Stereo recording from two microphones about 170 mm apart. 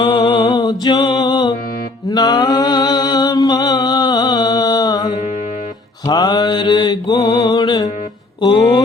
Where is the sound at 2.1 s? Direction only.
25° left (ahead or behind).